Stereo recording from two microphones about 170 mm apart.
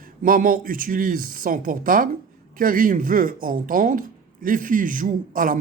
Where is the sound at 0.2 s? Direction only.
55° right (ahead or behind).